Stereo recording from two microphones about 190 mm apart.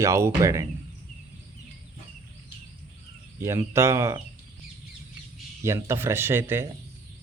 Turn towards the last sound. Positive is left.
turn(degrees=-10)  # may be behind; listen again after turning